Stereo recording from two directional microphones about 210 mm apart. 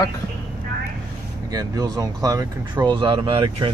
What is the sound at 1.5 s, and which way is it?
Speech, 15° right (ahead or behind).